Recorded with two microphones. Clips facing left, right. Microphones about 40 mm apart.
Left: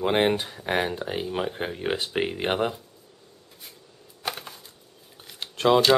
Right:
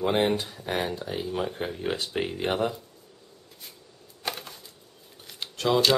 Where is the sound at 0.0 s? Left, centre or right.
Left.